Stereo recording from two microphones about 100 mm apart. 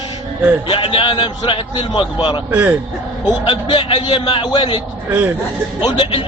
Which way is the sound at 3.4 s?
55° left (ahead or behind).